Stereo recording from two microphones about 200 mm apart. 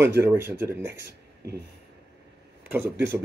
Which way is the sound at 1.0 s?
55° right (ahead or behind).